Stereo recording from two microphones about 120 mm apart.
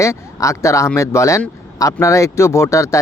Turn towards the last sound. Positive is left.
turn(degrees=25)  # may be behind; listen again after turning